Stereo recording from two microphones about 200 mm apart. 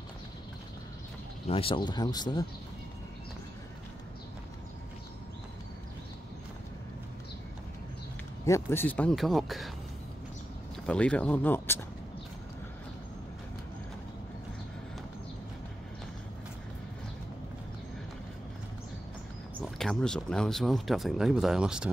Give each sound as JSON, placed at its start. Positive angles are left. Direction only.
{"t": 1.5, "sound": "speech", "side_deg": 25}
{"t": 8.5, "sound": "speech", "side_deg": 10}
{"t": 10.9, "sound": "speech", "side_deg": 5}
{"t": 19.6, "sound": "speech", "side_deg": 0}